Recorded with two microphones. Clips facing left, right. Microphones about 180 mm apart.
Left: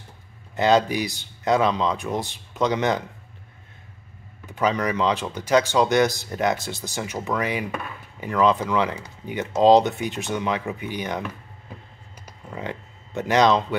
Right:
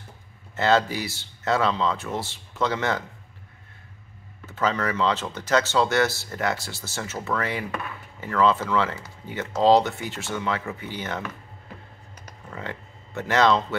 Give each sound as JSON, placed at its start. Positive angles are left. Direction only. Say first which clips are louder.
{"t": 0.6, "sound": "speech", "louder": "left 3 dB", "side_deg": 15}
{"t": 4.5, "sound": "speech", "louder": "left 2 dB", "side_deg": 15}
{"t": 12.3, "sound": "a sound", "louder": "left 3 dB", "side_deg": 15}